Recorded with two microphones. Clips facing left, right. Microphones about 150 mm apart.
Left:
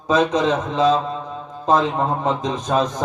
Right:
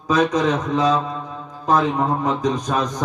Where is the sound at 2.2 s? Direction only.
25° left (ahead or behind).